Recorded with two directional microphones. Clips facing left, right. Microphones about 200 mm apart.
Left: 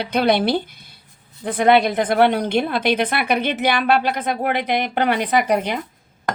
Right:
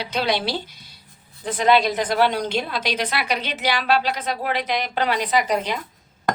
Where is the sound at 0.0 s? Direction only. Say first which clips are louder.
Left 6 dB; 55° left (ahead or behind).